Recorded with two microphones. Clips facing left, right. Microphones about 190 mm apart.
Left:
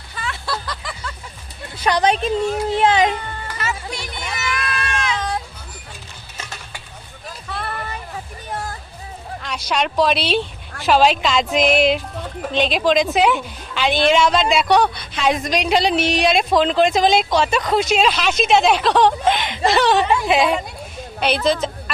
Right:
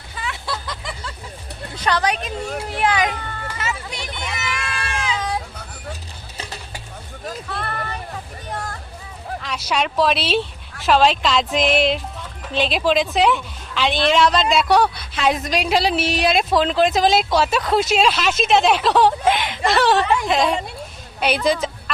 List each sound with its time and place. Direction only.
0.2 s vehicle: 20° right (ahead or behind)
1.8 s a woman's voice: 15° left (ahead or behind)
2.0 s speech: 30° left (ahead or behind)
3.6 s a sound: 20° right (ahead or behind)
4.5 s run: 30° right (ahead or behind)
6.3 s stir: 35° right (ahead or behind)
7.5 s a sound: centre (ahead or behind)
9.4 s speech: 5° right (ahead or behind)
21.2 s speech: 10° right (ahead or behind)